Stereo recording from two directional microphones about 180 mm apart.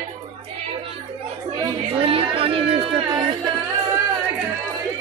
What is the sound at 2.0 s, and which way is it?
Chatter, 30° right (ahead or behind).